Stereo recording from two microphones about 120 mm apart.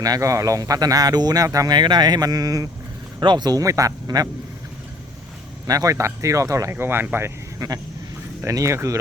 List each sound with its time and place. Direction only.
0.0 s speech: 30° right (ahead or behind)
5.6 s speech: 30° right (ahead or behind)